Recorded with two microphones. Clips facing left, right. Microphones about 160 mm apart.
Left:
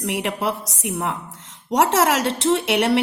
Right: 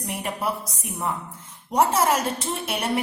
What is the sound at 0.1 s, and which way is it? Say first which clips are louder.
A woman's voice: left 3 dB; 80° left.